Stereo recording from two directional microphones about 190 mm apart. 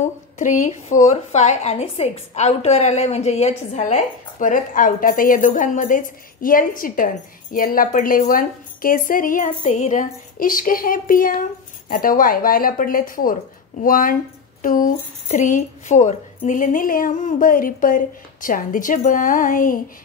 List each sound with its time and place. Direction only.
0.0 s a woman's voice: 40° left (ahead or behind)